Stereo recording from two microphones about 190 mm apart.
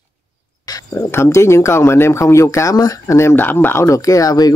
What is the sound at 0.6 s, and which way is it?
Speech, 15° left (ahead or behind).